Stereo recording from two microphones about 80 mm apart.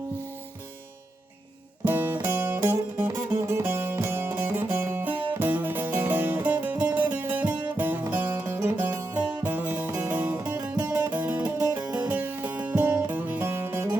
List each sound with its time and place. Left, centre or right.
1.9 s music: right
8.7 s music: centre
10.8 s music: right
11.1 s music: right
13.5 s music: right